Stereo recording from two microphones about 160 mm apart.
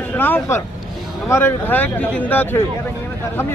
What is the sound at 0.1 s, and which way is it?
Speech, 15° left (ahead or behind).